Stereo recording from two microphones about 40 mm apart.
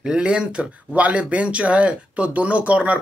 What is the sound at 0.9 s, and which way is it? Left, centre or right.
Speech, right.